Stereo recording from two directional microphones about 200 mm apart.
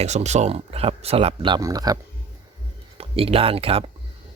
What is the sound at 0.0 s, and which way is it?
Speech, 35° right (ahead or behind).